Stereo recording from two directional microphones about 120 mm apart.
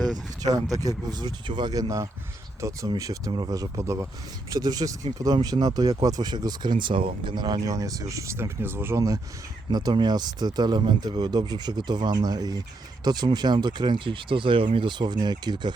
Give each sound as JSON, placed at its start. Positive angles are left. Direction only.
{"t": 0.4, "sound": "speech", "side_deg": -30}
{"t": 9.6, "sound": "speech", "side_deg": -40}